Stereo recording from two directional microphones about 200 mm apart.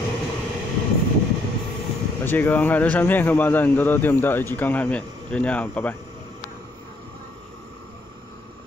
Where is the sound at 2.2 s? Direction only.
10° left (ahead or behind).